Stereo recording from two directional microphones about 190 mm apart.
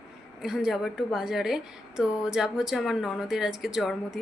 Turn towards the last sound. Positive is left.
turn(degrees=0)  # may be behind; listen again after turning